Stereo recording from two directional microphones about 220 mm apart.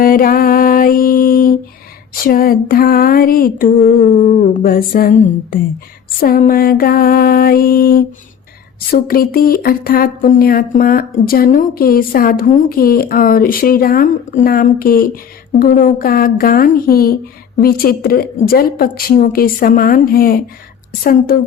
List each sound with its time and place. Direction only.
0.0 s mantra: 40° left (ahead or behind)
2.1 s a woman's voice: 40° left (ahead or behind)